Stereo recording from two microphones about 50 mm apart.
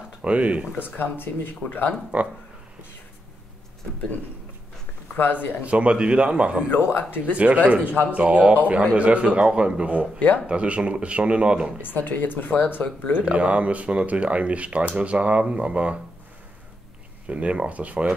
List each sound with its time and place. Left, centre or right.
0.2 s speech: right
0.7 s speech: left
2.1 s speech: right
5.1 s speech: left
5.6 s speech: right
6.9 s speech: left
7.3 s speech: right
10.1 s speech: left
10.4 s speech: right
11.8 s speech: left
13.3 s speech: right
17.3 s speech: right